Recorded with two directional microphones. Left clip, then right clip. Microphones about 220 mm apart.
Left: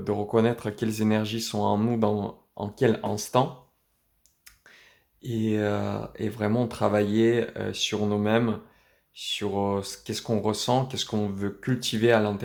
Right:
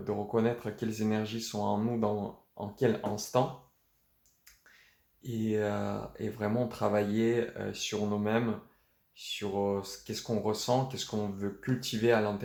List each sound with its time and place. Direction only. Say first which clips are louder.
0.0 s speech: left 6 dB; 45° left (ahead or behind)
5.2 s speech: left 5 dB; 45° left (ahead or behind)